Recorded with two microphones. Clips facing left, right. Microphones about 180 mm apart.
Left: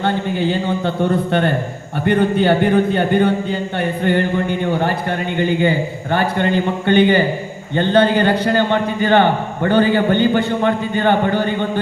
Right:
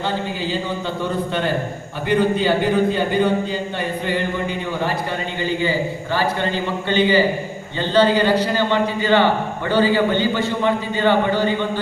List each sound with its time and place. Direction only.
0.0 s a man's voice: 60° left (ahead or behind)